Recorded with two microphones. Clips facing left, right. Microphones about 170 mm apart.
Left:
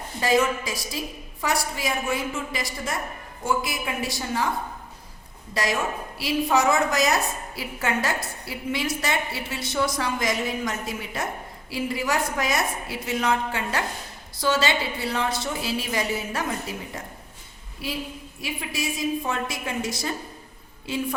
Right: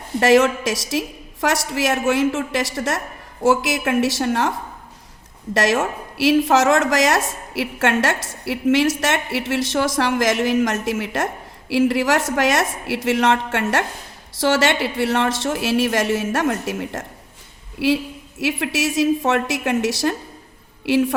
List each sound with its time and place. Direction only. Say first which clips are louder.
0.2 s a woman's voice: right 7 dB; 75° right (ahead or behind)
5.5 s a woman's voice: right 7 dB; 85° right